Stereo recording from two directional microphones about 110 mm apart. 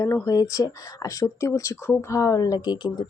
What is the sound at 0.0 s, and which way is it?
Speech, 25° left (ahead or behind).